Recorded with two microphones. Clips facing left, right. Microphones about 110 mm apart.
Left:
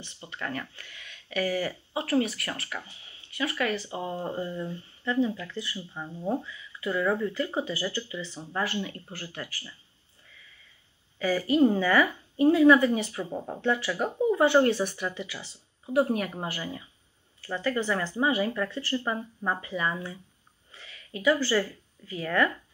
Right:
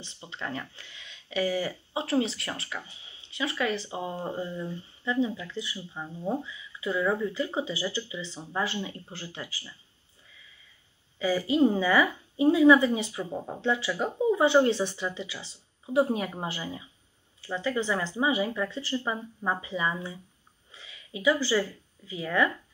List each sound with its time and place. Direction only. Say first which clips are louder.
0.2 s speech: left 1 dB; 20° right (ahead or behind); by 4.7 s centre (ahead or behind)
5.0 s speech: left 1 dB; 15° right (ahead or behind)
5.9 s speech: left 1 dB; centre (ahead or behind)
6.4 s speech: even; 15° right (ahead or behind)
11.1 s speech: left 1 dB; 15° right (ahead or behind)
13.2 s speech: even; centre (ahead or behind)
13.6 s speech: left 1 dB; 15° right (ahead or behind)